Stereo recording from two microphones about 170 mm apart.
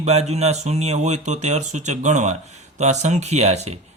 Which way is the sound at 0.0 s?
40° right (ahead or behind).